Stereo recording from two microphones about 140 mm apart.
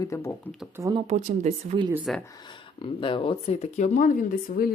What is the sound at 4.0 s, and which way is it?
Speech, 70° left (ahead or behind).